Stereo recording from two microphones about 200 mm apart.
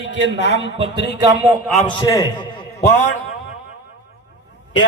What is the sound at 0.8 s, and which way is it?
Speech, 20° right (ahead or behind).